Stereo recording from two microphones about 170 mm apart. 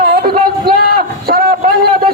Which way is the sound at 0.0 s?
60° right (ahead or behind).